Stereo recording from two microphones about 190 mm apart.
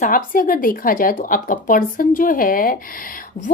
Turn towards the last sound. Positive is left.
turn(degrees=45)  # may be behind; listen again after turning